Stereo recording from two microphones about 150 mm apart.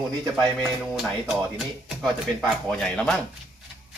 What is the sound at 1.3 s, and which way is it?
Speech, 5° right (ahead or behind).